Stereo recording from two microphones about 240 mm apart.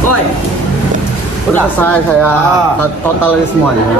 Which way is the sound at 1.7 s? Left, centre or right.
Centre.